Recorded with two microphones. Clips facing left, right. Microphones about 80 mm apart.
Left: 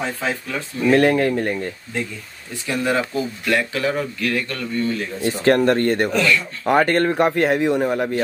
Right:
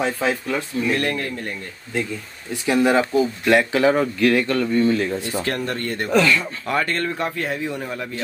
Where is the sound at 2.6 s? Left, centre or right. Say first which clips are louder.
Right 4 dB; centre.